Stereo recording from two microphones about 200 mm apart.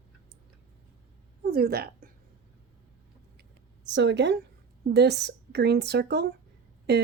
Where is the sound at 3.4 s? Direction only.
65° right (ahead or behind).